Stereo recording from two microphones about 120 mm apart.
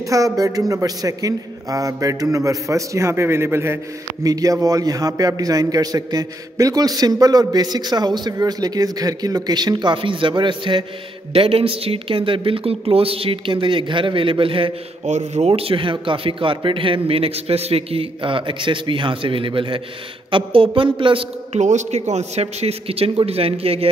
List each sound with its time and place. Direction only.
0.0 s a man's voice: 25° right (ahead or behind); by 14.7 s 45° right (ahead or behind)
15.0 s speech: 75° right (ahead or behind); by 21.3 s 45° right (ahead or behind)
21.5 s a man's voice: 80° right; by 23.9 s 55° right (ahead or behind)